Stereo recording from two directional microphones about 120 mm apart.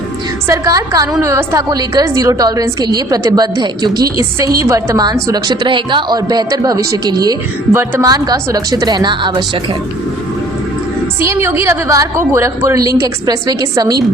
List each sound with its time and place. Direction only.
0.4 s a woman's voice: 25° right (ahead or behind)
4.2 s a woman's voice: 25° right (ahead or behind)
7.7 s speech: 20° right (ahead or behind)
8.0 s a woman's voice: 35° right (ahead or behind)
11.2 s a woman's voice: 20° right (ahead or behind)